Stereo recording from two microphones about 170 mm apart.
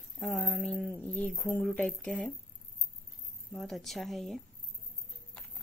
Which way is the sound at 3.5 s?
Centre (ahead or behind).